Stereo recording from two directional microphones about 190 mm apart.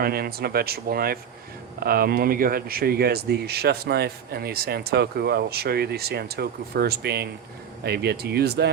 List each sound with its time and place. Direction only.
0.0 s speech: 55° right (ahead or behind)